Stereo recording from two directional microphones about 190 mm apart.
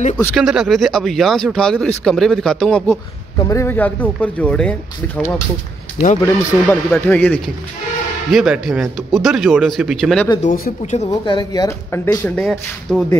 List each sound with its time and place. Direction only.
0.4 s speech: centre (ahead or behind)
3.3 s speech: 15° left (ahead or behind)
10.4 s speech: 40° left (ahead or behind)
11.1 s speech: 20° left (ahead or behind); by 13.0 s centre (ahead or behind)